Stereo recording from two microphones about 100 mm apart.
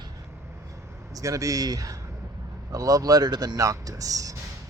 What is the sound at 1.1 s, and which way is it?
Speech, 35° right (ahead or behind).